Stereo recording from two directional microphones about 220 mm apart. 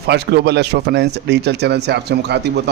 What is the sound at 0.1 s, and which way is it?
Speech, 50° right (ahead or behind).